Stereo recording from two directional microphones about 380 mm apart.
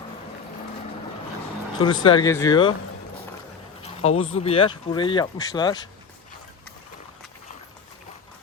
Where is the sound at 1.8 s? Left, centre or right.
Centre.